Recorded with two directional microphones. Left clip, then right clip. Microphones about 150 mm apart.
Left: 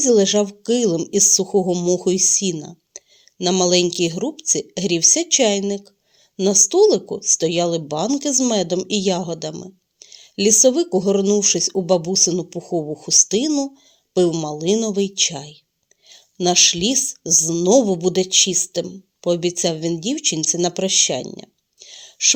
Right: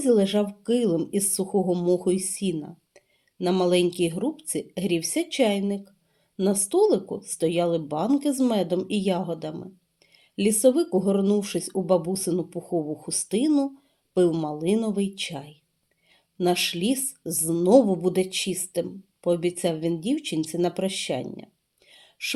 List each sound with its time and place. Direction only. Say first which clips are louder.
0.0 s a woman's voice: left 6 dB; 30° left (ahead or behind)
12.7 s speech: left 4 dB; 50° left (ahead or behind)
13.2 s a woman's voice: left 3 dB; 35° left (ahead or behind)
14.7 s speech: left 7 dB; 50° left (ahead or behind)
15.0 s speech: left 11 dB; 30° left (ahead or behind)
16.7 s a woman's voice: left 7 dB; 30° left (ahead or behind)
21.2 s speech: left 5 dB; 45° left (ahead or behind)